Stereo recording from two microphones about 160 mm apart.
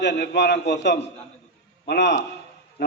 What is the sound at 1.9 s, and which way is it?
Speech, 85° left.